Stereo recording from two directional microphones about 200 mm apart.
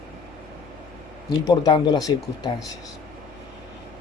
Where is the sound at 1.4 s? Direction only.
20° left (ahead or behind).